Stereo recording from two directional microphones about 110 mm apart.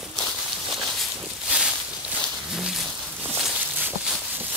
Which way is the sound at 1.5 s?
10° right (ahead or behind).